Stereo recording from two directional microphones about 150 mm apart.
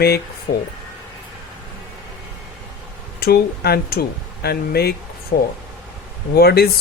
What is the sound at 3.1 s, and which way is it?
Speech, 90° left.